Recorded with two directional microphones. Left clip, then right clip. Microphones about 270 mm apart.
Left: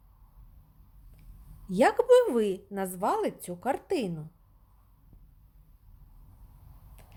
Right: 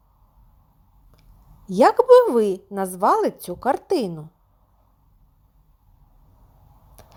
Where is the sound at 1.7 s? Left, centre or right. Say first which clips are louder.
Right 8 dB; centre.